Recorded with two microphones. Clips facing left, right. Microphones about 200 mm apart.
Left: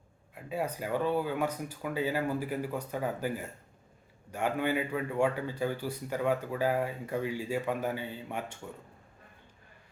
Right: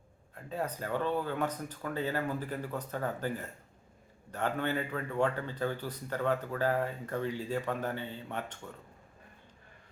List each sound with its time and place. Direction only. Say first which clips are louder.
0.3 s a man's voice: left 2 dB; 10° left (ahead or behind)